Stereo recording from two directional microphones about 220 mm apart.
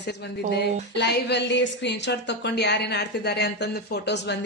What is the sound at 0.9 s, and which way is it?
Speech, 50° left (ahead or behind).